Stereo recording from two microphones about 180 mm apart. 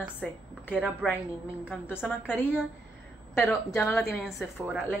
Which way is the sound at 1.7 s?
10° left (ahead or behind).